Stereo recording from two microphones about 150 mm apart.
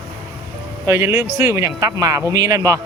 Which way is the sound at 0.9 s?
20° right (ahead or behind).